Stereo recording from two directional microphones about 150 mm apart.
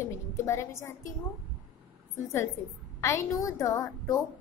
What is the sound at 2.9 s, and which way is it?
A woman's voice, 20° left (ahead or behind).